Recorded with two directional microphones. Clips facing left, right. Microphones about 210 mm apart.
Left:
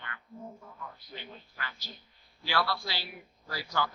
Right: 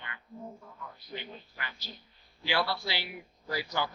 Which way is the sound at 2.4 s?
20° right (ahead or behind).